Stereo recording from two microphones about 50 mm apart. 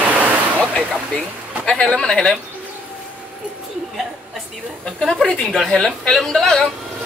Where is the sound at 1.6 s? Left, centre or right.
Centre.